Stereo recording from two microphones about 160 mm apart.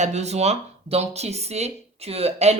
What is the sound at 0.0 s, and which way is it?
A woman's voice, 45° right (ahead or behind).